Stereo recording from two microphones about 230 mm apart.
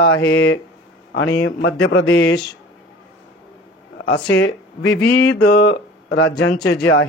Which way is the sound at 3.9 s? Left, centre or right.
Left.